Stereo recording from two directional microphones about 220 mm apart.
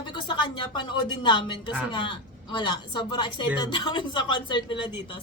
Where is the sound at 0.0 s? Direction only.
20° left (ahead or behind).